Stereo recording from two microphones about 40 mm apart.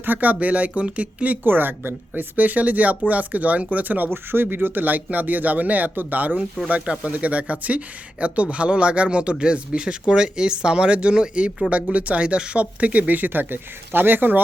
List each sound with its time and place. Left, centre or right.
0.0 s speech: right
1.5 s speech: right
4.1 s speech: right
4.4 s speech: right
6.7 s speech: right